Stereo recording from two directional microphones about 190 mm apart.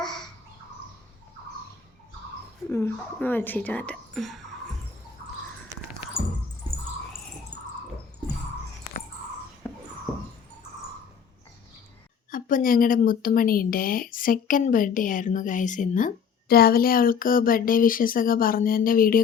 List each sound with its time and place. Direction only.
2.6 s speech: 10° left (ahead or behind)
6.2 s music: 20° right (ahead or behind)
7.5 s a sound: 45° right (ahead or behind)
12.3 s speech: 45° left (ahead or behind)